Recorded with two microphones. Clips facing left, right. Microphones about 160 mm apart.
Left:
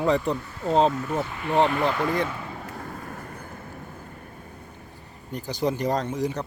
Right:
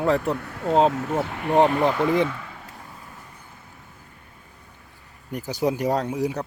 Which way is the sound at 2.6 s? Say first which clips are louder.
Left 7 dB; 55° left (ahead or behind).